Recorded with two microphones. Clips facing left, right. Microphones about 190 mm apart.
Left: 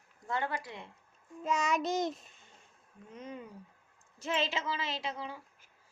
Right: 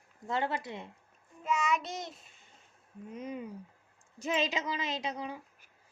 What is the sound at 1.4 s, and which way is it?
Speech, 40° left (ahead or behind).